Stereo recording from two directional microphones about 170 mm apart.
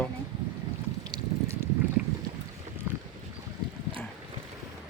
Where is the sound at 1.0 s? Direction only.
25° right (ahead or behind).